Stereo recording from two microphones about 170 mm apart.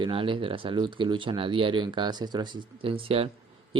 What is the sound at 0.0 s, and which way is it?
Speech, 30° right (ahead or behind).